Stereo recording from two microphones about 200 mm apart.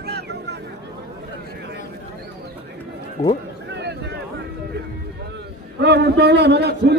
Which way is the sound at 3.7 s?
60° right (ahead or behind).